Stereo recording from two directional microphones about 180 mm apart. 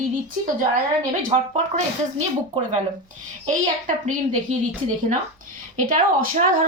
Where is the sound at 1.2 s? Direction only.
45° right (ahead or behind).